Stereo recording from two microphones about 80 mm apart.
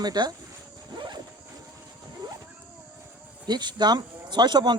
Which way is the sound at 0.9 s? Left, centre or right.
Right.